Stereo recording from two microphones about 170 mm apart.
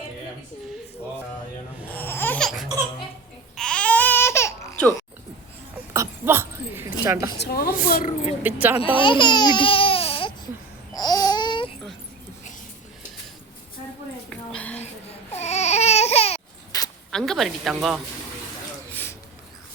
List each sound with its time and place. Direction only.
1.9 s laughter: 10° left (ahead or behind)
3.5 s baby cry: 5° left (ahead or behind)
5.9 s a sound: 15° right (ahead or behind)
7.0 s speech: 15° right (ahead or behind)
7.3 s a woman's voice: 70° left (ahead or behind); by 8.4 s 50° left (ahead or behind)
8.4 s speech: 10° right (ahead or behind)
9.0 s baby cry: 30° left (ahead or behind)
10.9 s babbling: 25° left (ahead or behind)
14.3 s a sound: 10° left (ahead or behind)
15.3 s baby cry: 40° left (ahead or behind)
16.7 s zipper: 20° left (ahead or behind)
17.1 s a sound: 5° left (ahead or behind)
18.9 s a sound: 10° left (ahead or behind)